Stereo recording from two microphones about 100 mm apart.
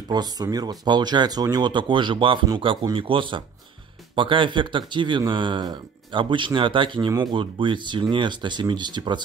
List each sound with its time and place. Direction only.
0.1 s speech: 40° right (ahead or behind)